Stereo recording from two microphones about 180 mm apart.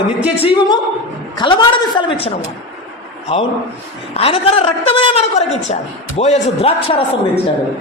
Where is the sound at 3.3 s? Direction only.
35° left (ahead or behind).